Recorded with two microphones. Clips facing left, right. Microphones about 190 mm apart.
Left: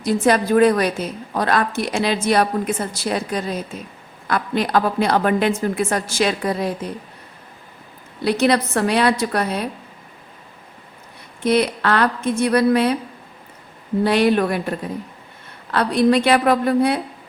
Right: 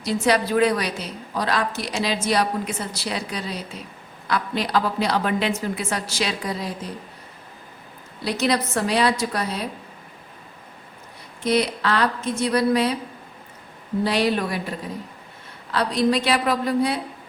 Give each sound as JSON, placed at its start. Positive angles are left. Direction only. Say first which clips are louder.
{"t": 0.0, "sound": "a woman's voice", "louder": "left 4 dB", "side_deg": 50}
{"t": 8.2, "sound": "a woman's voice", "louder": "left 5 dB", "side_deg": 60}
{"t": 11.4, "sound": "a woman's voice", "louder": "left 4 dB", "side_deg": 60}
{"t": 14.0, "sound": "a woman's voice", "louder": "left 5 dB", "side_deg": 55}